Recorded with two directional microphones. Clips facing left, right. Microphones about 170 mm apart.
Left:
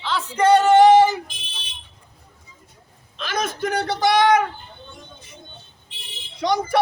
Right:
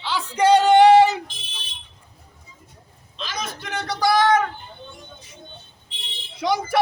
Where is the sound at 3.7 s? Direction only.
35° left (ahead or behind).